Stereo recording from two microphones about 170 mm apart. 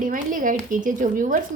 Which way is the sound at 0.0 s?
50° right (ahead or behind).